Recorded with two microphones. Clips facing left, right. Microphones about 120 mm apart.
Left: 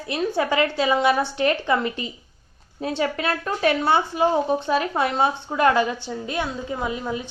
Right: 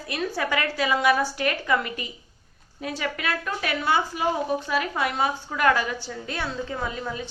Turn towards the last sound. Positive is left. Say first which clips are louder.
# left 4 dB
turn(degrees=20)  # may be behind; listen again after turning